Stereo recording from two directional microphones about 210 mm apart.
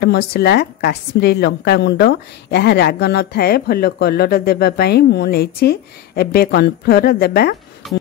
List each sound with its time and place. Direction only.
0.0 s a woman's voice: 50° left (ahead or behind)
7.8 s speech: centre (ahead or behind)